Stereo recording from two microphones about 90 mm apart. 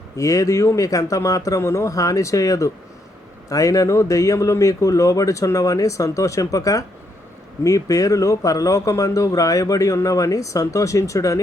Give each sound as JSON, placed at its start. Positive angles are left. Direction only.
{"t": 0.2, "sound": "speech", "side_deg": 35}